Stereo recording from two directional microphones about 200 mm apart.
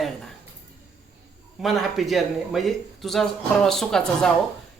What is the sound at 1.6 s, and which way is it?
Speech, centre (ahead or behind).